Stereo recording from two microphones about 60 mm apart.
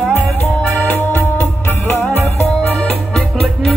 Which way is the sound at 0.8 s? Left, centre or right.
Left.